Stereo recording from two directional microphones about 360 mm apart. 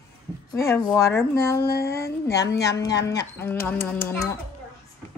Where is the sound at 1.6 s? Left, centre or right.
Left.